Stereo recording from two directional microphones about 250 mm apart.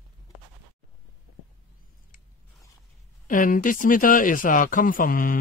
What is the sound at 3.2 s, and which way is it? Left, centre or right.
Speech, left.